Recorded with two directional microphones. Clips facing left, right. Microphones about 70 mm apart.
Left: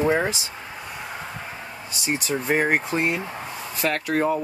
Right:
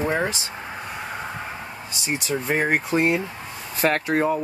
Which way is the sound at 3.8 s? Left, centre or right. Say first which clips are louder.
Right 3 dB; right.